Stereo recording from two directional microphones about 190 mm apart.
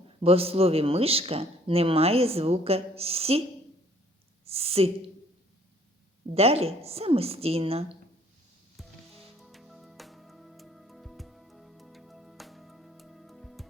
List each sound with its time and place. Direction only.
0.2 s speech: 30° right (ahead or behind)
4.4 s a woman's voice: 30° right (ahead or behind)
6.3 s speech: 30° right (ahead or behind)
8.8 s music: centre (ahead or behind)